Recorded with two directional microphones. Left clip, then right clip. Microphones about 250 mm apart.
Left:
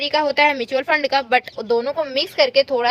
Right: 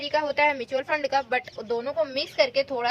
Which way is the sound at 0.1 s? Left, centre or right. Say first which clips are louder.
Left 5 dB; left.